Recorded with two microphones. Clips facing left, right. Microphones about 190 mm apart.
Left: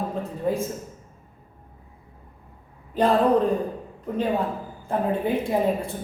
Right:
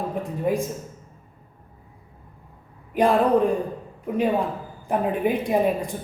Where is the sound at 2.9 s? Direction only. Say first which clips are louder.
Right 1 dB; 10° right (ahead or behind).